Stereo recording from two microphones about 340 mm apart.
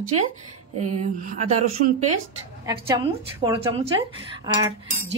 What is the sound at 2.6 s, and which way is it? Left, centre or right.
A woman's voice, centre.